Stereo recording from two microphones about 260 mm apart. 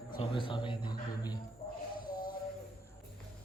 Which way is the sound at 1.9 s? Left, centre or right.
Left.